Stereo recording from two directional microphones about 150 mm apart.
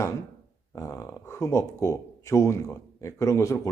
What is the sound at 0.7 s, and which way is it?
Speech, 20° left (ahead or behind).